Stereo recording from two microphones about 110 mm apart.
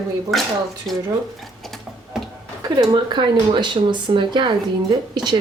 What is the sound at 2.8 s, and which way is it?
A woman's voice, 45° right (ahead or behind).